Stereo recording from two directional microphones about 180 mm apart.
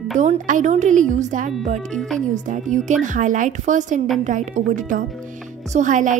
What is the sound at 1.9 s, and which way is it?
Speech, 5° left (ahead or behind).